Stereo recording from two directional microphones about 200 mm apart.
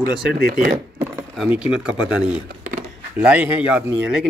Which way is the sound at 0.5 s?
50° right (ahead or behind).